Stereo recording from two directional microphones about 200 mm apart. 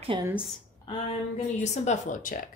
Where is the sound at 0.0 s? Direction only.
25° right (ahead or behind).